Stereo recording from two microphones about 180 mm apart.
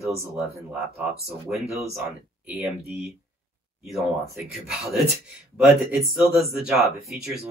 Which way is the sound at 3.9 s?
Centre (ahead or behind).